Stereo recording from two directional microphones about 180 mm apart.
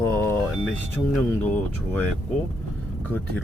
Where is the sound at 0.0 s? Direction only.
15° left (ahead or behind).